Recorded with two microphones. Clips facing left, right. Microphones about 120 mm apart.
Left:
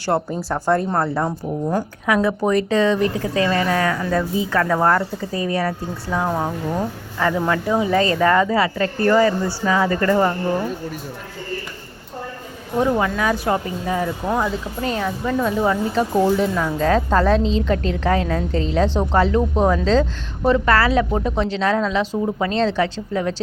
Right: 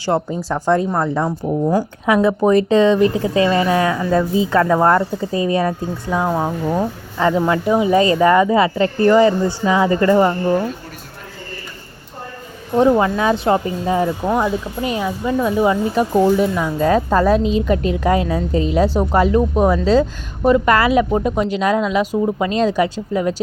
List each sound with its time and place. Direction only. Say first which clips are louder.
0.0 s speech: right 2 dB; 15° right (ahead or behind)
0.4 s speech: right 3 dB; 10° left (ahead or behind)
2.0 s speech: right 4 dB; 20° right (ahead or behind)
6.7 s speech: right 4 dB; 25° right (ahead or behind)
12.8 s speech: right 5 dB; 25° right (ahead or behind); by 23.3 s 10° right (ahead or behind)